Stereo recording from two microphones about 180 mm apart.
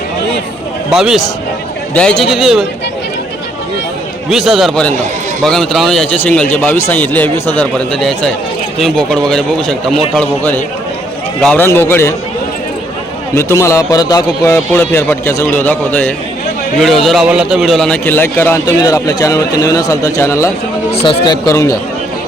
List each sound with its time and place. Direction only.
0.9 s a man's voice: centre (ahead or behind)
4.3 s a man's voice: centre (ahead or behind)
13.3 s a man's voice: 15° left (ahead or behind)